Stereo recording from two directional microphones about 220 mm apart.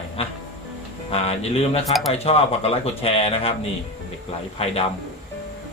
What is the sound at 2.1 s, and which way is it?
A man's voice, 25° left (ahead or behind).